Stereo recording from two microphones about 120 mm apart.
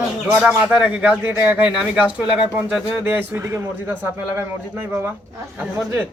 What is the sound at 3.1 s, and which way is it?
Speech, 25° right (ahead or behind).